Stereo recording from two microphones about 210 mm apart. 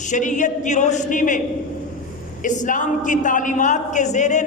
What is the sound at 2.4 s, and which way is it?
A man's voice, 35° left (ahead or behind).